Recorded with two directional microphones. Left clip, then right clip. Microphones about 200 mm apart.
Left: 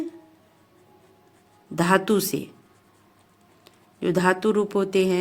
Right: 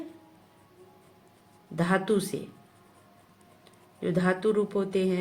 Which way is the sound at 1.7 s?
55° left (ahead or behind).